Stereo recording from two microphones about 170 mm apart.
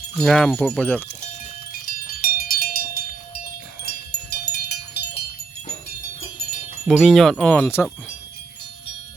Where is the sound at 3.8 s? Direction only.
70° left (ahead or behind).